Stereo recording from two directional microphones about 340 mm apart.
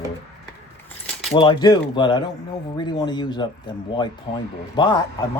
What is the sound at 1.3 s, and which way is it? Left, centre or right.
Speech, centre.